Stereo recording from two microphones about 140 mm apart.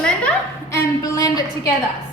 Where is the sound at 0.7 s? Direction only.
25° left (ahead or behind).